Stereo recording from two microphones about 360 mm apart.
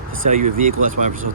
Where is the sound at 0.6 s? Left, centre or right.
Right.